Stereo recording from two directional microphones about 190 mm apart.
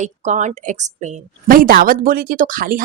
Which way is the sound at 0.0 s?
40° right (ahead or behind).